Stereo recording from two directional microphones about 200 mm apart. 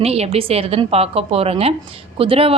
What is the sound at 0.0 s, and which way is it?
A woman's voice, 30° right (ahead or behind).